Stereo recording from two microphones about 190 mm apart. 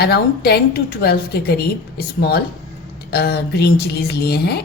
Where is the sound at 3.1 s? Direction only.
55° left (ahead or behind).